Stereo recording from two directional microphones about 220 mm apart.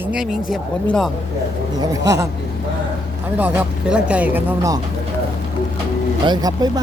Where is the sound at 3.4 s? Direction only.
10° right (ahead or behind).